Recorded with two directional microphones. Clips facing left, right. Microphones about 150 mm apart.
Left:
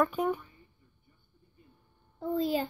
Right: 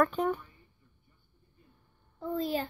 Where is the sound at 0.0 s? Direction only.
10° left (ahead or behind).